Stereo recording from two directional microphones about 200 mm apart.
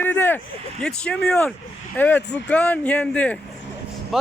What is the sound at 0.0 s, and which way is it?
Speech, 10° left (ahead or behind).